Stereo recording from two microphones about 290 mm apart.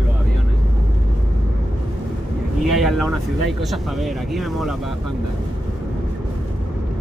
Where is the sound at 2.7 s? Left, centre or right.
Centre.